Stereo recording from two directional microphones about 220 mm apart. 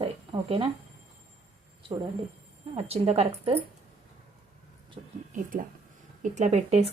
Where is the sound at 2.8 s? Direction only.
30° right (ahead or behind).